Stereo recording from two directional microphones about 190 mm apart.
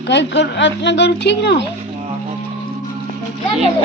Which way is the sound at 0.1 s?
65° left (ahead or behind).